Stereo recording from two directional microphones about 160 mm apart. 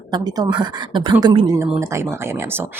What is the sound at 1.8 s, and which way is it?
Speech, 15° right (ahead or behind).